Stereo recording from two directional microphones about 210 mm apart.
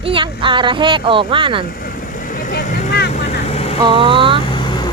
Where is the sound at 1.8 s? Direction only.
40° left (ahead or behind).